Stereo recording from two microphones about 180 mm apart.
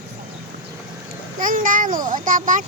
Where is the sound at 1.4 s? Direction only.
45° right (ahead or behind).